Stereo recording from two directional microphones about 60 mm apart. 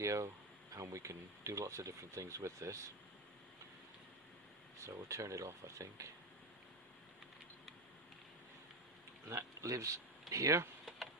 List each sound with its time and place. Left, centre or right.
0.0 s speech: right
4.8 s speech: right
9.3 s speech: right